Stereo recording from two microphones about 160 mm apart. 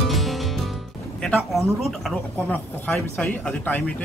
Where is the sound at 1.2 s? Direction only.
Centre (ahead or behind).